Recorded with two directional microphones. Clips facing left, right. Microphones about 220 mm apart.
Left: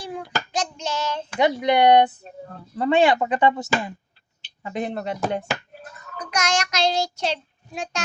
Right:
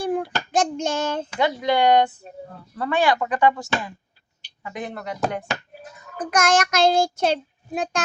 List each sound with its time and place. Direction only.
0.0 s child singing: 55° right (ahead or behind)
1.4 s speech: 20° left (ahead or behind)
5.7 s a sound: 15° right (ahead or behind)
6.1 s child singing: 50° right (ahead or behind)